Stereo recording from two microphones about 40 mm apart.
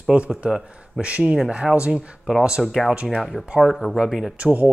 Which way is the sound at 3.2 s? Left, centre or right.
Centre.